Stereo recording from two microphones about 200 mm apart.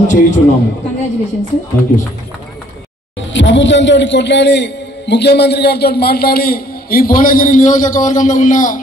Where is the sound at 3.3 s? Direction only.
65° left (ahead or behind).